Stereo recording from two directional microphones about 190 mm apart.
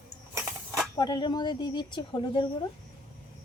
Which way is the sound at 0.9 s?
25° left (ahead or behind).